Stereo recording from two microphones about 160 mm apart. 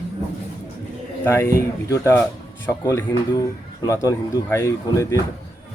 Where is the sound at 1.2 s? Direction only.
15° left (ahead or behind).